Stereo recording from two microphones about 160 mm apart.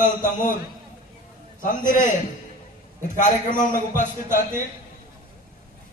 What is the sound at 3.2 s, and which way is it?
Speech, 50° left (ahead or behind).